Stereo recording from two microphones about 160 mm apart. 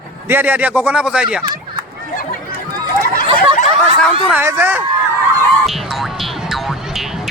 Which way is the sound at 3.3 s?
55° left (ahead or behind).